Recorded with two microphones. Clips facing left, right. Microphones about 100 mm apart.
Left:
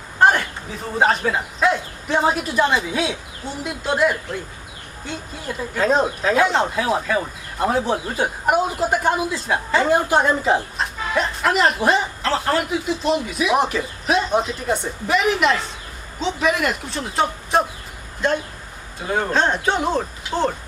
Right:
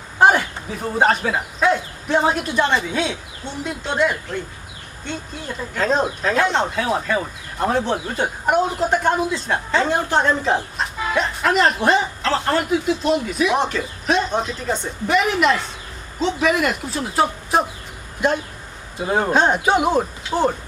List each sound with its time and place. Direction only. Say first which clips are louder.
0.2 s speech: right 1 dB; 5° right (ahead or behind)
5.7 s speech: left 1 dB; 5° left (ahead or behind)
19.0 s speech: right 3 dB; 20° right (ahead or behind)